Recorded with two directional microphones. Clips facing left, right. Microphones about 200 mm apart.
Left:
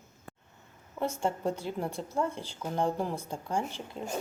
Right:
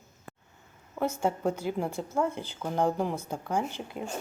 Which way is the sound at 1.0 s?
5° right (ahead or behind).